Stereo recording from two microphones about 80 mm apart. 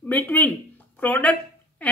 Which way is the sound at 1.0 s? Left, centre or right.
Centre.